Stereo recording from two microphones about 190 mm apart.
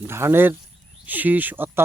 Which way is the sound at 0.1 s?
10° right (ahead or behind).